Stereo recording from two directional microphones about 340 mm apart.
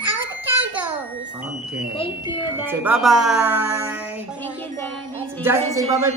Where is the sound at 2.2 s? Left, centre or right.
Centre.